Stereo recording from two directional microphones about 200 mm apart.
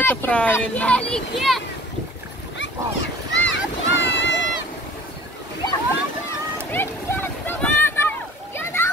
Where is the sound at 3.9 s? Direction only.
65° left (ahead or behind).